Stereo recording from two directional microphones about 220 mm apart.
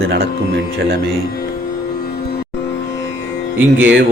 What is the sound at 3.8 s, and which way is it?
Speech, 50° right (ahead or behind).